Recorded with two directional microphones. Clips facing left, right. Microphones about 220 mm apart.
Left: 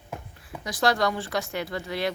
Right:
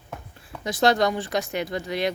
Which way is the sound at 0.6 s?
25° right (ahead or behind).